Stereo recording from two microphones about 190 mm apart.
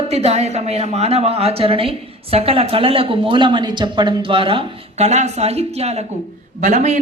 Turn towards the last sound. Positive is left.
turn(degrees=-35)  # may be behind; listen again after turning